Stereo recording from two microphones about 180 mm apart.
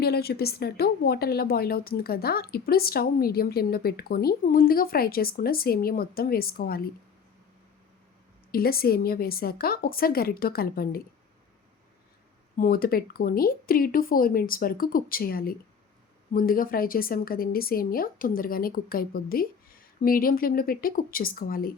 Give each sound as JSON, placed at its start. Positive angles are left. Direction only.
{"t": 0.0, "sound": "speech", "side_deg": 60}
{"t": 8.5, "sound": "speech", "side_deg": 55}
{"t": 12.5, "sound": "a woman's voice", "side_deg": 55}